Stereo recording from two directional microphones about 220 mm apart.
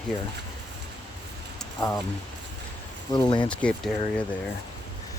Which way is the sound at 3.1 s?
20° left (ahead or behind).